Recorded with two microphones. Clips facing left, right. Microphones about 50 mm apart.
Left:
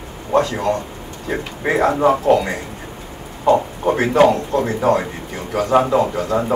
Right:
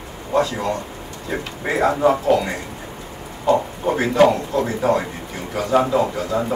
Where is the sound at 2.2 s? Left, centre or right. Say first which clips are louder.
Left 3 dB; left.